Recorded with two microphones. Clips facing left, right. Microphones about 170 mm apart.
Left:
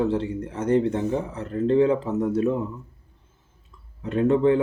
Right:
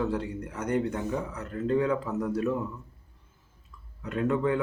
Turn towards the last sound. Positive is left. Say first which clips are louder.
# left 7 dB
turn(degrees=30)  # may be behind; listen again after turning